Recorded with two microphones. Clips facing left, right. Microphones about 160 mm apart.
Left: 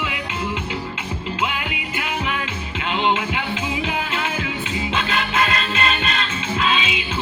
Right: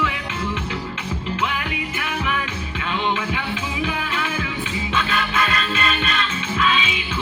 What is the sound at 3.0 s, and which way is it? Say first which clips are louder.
Music: left 3 dB; 25° left (ahead or behind).